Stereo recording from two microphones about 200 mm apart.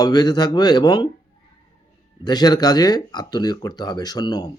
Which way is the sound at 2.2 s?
20° left (ahead or behind).